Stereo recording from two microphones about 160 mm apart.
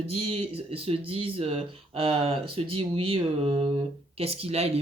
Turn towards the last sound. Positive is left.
turn(degrees=-40)  # may be behind; listen again after turning